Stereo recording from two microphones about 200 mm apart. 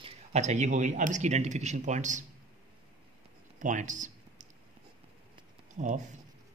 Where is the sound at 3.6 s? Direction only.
40° right (ahead or behind).